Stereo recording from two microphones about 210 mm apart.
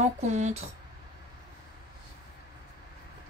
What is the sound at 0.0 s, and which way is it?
Speech, 35° right (ahead or behind).